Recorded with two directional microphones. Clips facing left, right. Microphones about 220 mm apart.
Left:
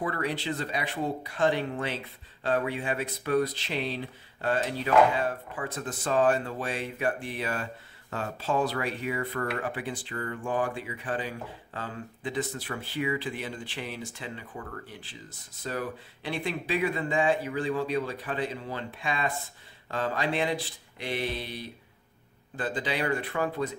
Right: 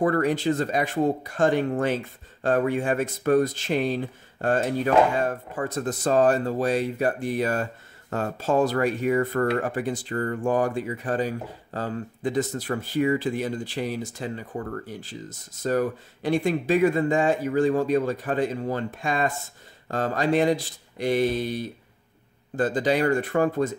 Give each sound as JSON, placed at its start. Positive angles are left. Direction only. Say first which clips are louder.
{"t": 0.0, "sound": "speech", "louder": "right 9 dB", "side_deg": -45}